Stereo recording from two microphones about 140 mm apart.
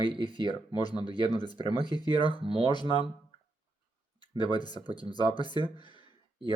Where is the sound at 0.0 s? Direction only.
35° right (ahead or behind).